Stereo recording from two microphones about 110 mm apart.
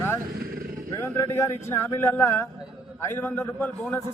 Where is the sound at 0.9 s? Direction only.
25° left (ahead or behind).